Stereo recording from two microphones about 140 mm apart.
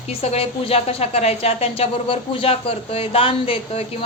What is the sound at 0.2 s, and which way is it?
A woman's voice, 45° left (ahead or behind).